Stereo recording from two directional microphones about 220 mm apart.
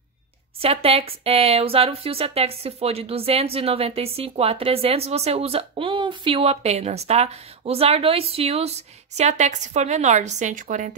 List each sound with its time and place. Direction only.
0.6 s speech: 25° right (ahead or behind)